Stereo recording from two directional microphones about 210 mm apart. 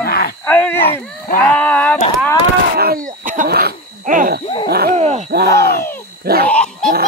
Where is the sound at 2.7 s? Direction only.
45° right (ahead or behind).